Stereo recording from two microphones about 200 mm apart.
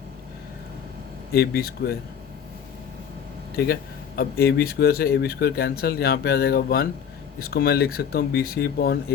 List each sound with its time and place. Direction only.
1.3 s speech: 50° left (ahead or behind)
3.5 s speech: 50° left (ahead or behind)